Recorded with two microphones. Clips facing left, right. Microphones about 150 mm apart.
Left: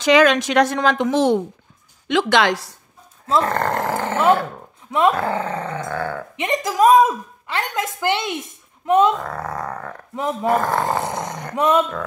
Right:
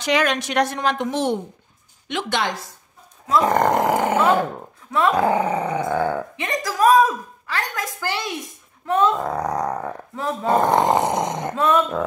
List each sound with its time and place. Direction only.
0.0 s a woman's voice: 90° left
3.3 s dog: 15° right (ahead or behind)
6.3 s speech: 20° left (ahead or behind)
9.1 s speech: 20° right (ahead or behind)
11.5 s speech: 20° left (ahead or behind)